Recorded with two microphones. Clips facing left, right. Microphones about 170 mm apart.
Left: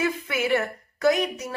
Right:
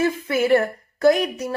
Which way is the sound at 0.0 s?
35° right (ahead or behind).